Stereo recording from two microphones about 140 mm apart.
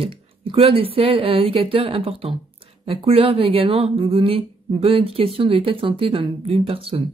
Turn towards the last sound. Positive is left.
turn(degrees=-45)  # may be behind; listen again after turning